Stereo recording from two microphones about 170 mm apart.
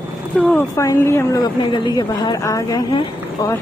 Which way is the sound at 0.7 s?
15° left (ahead or behind).